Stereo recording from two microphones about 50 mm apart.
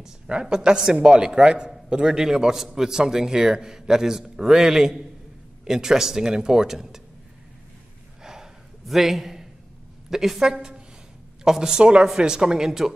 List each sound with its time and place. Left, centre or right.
0.3 s a man's voice: centre
8.2 s gasp: centre
10.0 s a woman's voice: centre